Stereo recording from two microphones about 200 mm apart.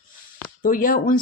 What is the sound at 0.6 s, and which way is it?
Speech, 45° left (ahead or behind).